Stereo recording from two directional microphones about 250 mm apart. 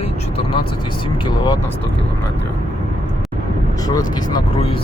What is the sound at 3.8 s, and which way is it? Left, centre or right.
Speech, centre.